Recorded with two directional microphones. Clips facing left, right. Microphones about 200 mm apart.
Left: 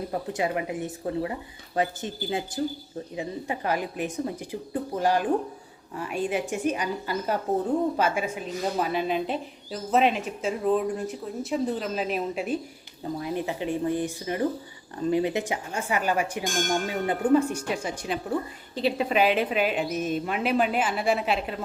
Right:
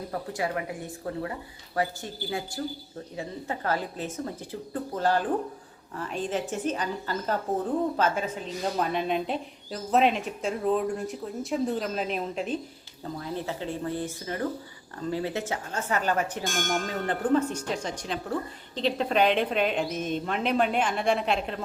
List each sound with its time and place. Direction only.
0.1 s a woman's voice: 20° left (ahead or behind); by 21.6 s 5° left (ahead or behind)